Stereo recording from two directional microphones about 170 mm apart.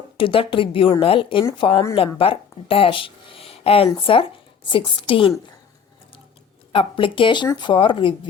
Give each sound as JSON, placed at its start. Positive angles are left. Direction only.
{"t": 0.2, "sound": "a woman's voice", "side_deg": 30}
{"t": 6.7, "sound": "speech", "side_deg": 30}